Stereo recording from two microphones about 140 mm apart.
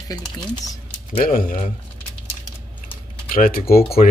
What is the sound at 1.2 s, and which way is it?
Speech, 85° left.